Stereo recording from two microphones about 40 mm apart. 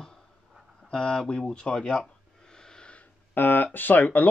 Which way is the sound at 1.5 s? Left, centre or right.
Left.